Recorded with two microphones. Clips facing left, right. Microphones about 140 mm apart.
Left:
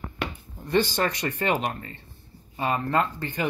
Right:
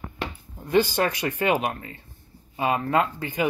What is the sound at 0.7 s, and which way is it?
Speech, 10° right (ahead or behind).